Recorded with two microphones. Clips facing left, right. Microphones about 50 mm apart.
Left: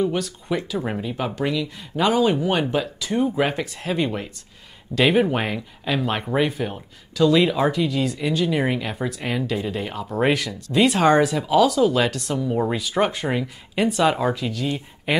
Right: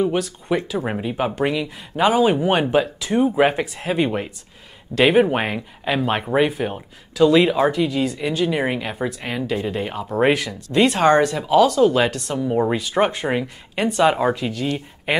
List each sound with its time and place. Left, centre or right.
0.0 s speech: centre
1.8 s speech: centre
3.3 s speech: right
4.9 s speech: centre
5.3 s speech: centre